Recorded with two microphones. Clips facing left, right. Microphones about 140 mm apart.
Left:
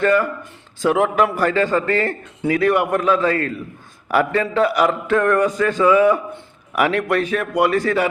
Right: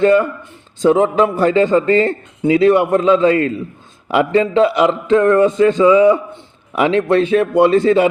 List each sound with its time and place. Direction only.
0.0 s speech: 20° right (ahead or behind)